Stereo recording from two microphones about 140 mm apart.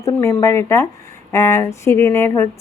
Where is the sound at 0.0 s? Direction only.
20° left (ahead or behind).